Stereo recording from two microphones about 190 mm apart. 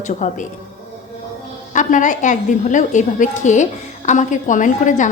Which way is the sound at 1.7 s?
40° left (ahead or behind).